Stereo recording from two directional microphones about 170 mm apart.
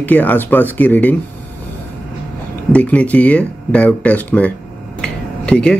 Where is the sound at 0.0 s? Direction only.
10° left (ahead or behind).